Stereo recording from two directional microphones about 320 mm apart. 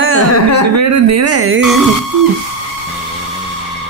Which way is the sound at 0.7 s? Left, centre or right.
Right.